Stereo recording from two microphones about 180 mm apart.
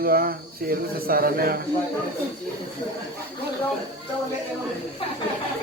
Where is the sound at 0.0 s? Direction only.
55° right (ahead or behind).